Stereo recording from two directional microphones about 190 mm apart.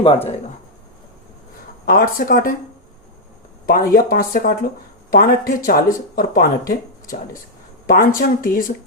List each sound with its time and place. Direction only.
1.8 s speech: 50° left (ahead or behind)
3.7 s speech: 50° left (ahead or behind)